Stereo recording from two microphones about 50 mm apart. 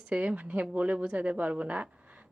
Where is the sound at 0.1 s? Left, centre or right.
Right.